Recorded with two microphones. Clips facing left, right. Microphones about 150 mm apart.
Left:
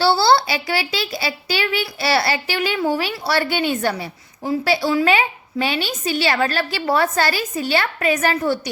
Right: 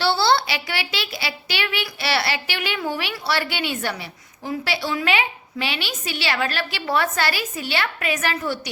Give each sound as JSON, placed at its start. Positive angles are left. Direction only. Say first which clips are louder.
{"t": 0.0, "sound": "speech", "louder": "left 4 dB", "side_deg": 35}